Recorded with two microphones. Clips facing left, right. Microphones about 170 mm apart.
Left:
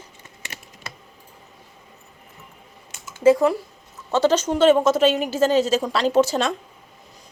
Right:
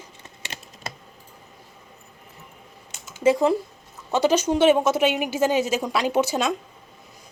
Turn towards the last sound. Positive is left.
turn(degrees=-10)  # may be behind; listen again after turning